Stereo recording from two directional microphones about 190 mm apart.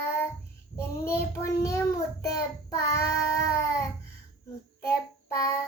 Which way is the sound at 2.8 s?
15° left (ahead or behind).